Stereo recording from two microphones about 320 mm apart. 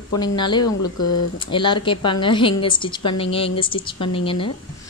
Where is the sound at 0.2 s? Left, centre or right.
Centre.